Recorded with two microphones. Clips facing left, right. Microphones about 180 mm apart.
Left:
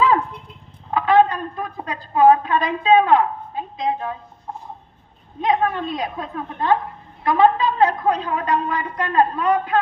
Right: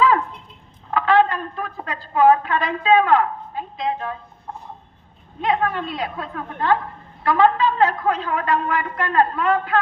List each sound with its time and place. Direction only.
0.9 s a woman's voice: 15° left (ahead or behind)
5.4 s a woman's voice: 20° left (ahead or behind)